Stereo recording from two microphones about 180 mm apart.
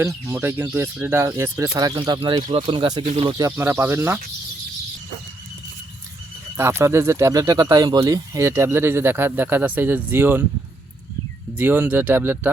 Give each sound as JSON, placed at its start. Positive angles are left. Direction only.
{"t": 0.0, "sound": "speech", "side_deg": -15}
{"t": 3.1, "sound": "speech", "side_deg": -35}
{"t": 3.3, "sound": "speech", "side_deg": -15}
{"t": 6.6, "sound": "speech", "side_deg": -15}
{"t": 11.5, "sound": "speech", "side_deg": -10}